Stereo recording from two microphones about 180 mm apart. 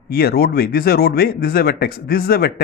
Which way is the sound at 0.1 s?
60° left (ahead or behind).